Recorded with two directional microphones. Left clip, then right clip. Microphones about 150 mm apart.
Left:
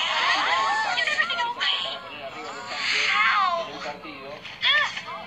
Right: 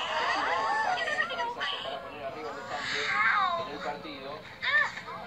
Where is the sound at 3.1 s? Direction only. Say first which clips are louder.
Left 2 dB; 35° left (ahead or behind).